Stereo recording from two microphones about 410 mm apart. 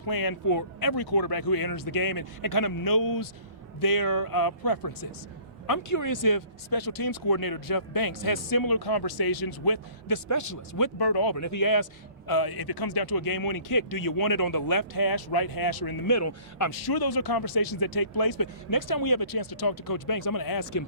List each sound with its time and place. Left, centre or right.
0.0 s speech: left
10.2 s speech: left
11.3 s speech: left
12.3 s speech: left
16.1 s speech: left
16.8 s speech: left